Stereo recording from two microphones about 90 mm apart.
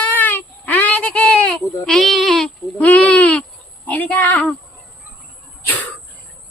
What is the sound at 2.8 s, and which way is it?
Speech, 15° left (ahead or behind).